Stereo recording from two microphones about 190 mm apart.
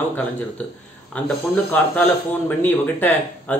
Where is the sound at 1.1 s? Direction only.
10° left (ahead or behind).